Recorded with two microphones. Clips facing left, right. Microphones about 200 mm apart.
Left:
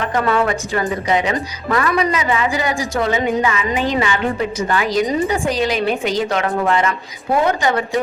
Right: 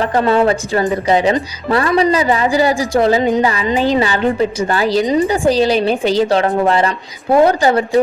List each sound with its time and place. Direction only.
0.0 s a woman's voice: 30° right (ahead or behind)